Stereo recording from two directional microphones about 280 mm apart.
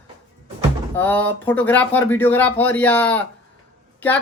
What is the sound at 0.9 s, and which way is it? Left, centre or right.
Speech, centre.